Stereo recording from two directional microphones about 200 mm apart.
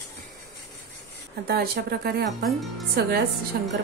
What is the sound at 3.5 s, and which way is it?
Cutlery, 50° right (ahead or behind).